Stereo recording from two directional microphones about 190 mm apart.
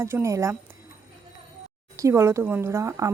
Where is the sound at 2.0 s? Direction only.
15° right (ahead or behind).